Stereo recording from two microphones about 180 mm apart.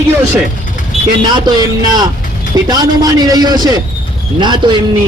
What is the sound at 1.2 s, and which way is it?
A man's voice, 25° right (ahead or behind).